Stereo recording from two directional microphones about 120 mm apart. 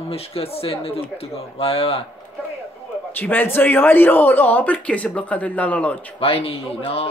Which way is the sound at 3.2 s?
15° left (ahead or behind).